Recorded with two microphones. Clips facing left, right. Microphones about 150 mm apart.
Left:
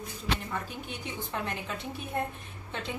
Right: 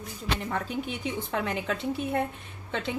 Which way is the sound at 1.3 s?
85° right.